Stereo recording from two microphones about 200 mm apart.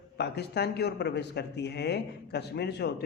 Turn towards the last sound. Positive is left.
turn(degrees=55)  # may be behind; listen again after turning